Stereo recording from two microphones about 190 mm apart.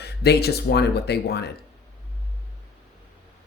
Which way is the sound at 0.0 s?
55° left (ahead or behind).